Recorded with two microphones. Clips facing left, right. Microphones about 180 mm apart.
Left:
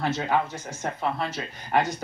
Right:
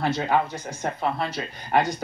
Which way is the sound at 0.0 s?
35° right (ahead or behind).